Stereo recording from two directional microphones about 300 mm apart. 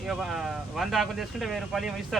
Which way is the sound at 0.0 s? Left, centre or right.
Centre.